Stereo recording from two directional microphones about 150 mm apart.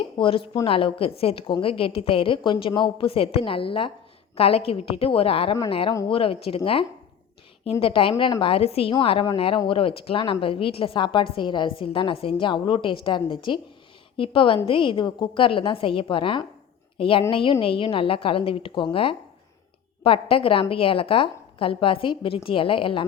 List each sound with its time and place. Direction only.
0.2 s speech: 35° left (ahead or behind)
7.6 s speech: 40° left (ahead or behind)